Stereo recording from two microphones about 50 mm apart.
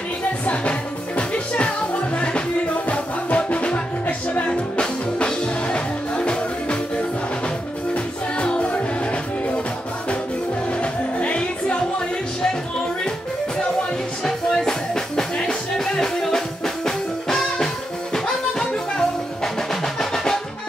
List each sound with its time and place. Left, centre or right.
0.5 s music: left
10.7 s music: left
14.2 s music: centre